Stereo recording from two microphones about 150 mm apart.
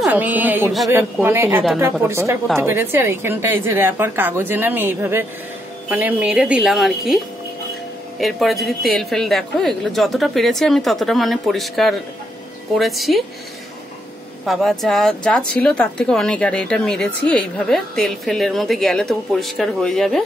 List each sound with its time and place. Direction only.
0.0 s a woman's voice: 10° right (ahead or behind)
8.2 s speech: centre (ahead or behind)
14.4 s speech: centre (ahead or behind)